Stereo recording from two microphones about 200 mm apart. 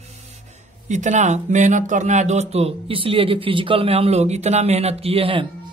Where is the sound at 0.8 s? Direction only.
35° right (ahead or behind).